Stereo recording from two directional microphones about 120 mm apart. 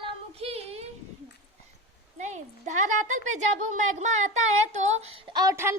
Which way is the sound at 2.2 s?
80° right.